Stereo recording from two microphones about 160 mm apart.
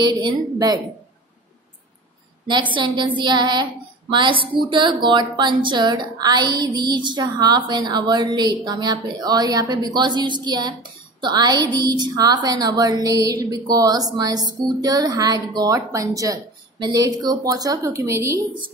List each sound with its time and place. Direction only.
0.0 s speech: 25° right (ahead or behind)
2.7 s speech: 30° right (ahead or behind)